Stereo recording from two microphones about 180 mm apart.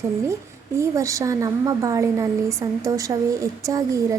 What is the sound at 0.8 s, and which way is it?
A woman's voice, 15° right (ahead or behind).